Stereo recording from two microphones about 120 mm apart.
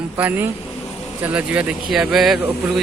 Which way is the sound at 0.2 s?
15° right (ahead or behind).